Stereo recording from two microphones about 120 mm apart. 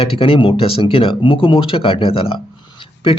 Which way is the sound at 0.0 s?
50° left (ahead or behind).